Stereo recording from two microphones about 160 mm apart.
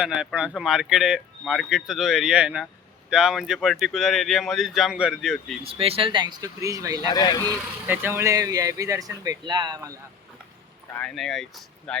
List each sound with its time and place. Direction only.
0.0 s speech: 5° right (ahead or behind)
5.6 s speech: 35° right (ahead or behind); by 7.0 s 20° right (ahead or behind)
7.1 s speech: 25° left (ahead or behind)
7.9 s speech: 15° right (ahead or behind)
10.9 s speech: 5° left (ahead or behind)